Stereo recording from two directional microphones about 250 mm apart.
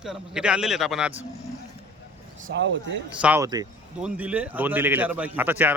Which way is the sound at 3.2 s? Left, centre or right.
Centre.